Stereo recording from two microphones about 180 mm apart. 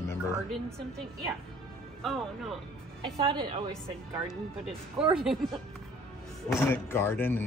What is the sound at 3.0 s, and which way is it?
Speech, 25° right (ahead or behind).